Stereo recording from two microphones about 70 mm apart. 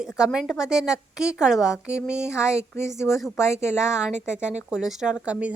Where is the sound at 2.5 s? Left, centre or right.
Left.